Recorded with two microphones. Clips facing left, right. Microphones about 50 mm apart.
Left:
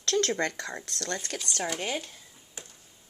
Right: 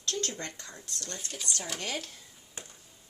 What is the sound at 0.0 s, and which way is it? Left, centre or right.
Speech, left.